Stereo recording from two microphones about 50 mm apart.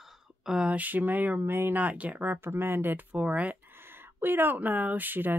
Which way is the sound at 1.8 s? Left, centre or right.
Right.